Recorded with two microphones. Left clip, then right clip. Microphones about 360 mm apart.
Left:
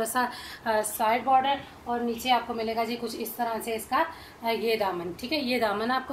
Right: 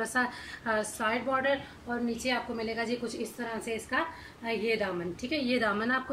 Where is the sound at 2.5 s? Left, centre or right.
Left.